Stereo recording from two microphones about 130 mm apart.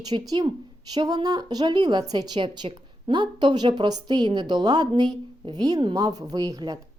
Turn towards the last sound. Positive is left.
turn(degrees=-30)  # may be behind; listen again after turning